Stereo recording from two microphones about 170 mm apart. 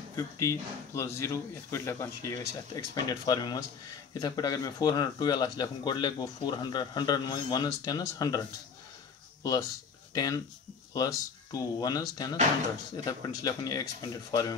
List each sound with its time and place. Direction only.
0.1 s speech: 20° left (ahead or behind)
10.1 s speech: 20° left (ahead or behind)
11.5 s speech: 20° left (ahead or behind)